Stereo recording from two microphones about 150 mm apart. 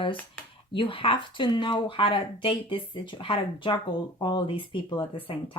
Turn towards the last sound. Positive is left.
turn(degrees=35)  # may be behind; listen again after turning